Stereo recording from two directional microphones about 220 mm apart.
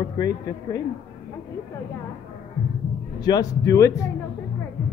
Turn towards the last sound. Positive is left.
turn(degrees=15)  # may be behind; listen again after turning